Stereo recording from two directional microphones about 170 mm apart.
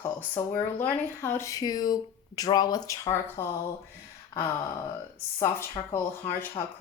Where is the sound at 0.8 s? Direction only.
15° left (ahead or behind).